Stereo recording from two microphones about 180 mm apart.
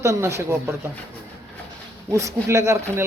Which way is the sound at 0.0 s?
15° right (ahead or behind).